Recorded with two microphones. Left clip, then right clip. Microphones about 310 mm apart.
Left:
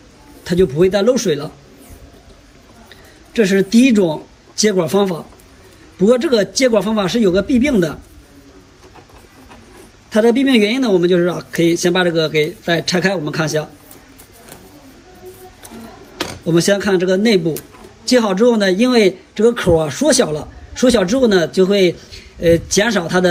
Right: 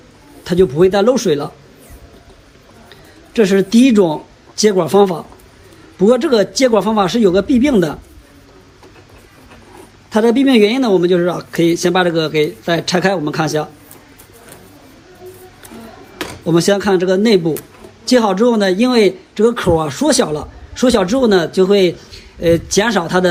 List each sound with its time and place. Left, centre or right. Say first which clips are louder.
0.4 s speech: right 2 dB; centre
3.3 s speech: right 2 dB; centre
10.1 s speech: right 1 dB; centre
16.5 s speech: right 2 dB; centre